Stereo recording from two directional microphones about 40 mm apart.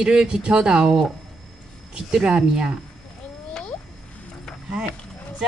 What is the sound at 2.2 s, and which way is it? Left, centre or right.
Speech, right.